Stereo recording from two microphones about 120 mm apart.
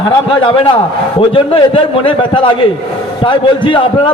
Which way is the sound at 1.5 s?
45° left (ahead or behind).